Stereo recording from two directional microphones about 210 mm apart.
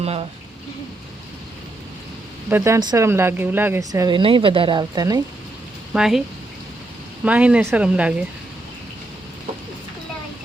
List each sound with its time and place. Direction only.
0.0 s speech: 30° right (ahead or behind)
2.5 s speech: 10° right (ahead or behind)
5.9 s speech: 5° right (ahead or behind)
7.3 s speech: 5° right (ahead or behind)